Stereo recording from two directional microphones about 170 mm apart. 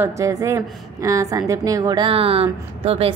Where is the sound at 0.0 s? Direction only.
20° right (ahead or behind).